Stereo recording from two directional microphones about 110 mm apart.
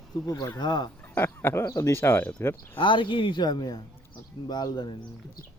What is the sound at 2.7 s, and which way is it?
Speech, 50° left (ahead or behind).